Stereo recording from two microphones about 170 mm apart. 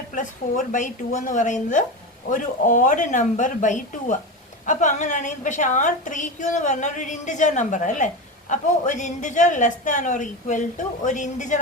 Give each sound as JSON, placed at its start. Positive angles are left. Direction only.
{"t": 0.1, "sound": "a woman's voice", "side_deg": 50}